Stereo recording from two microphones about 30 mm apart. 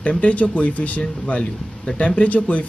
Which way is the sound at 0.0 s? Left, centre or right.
Left.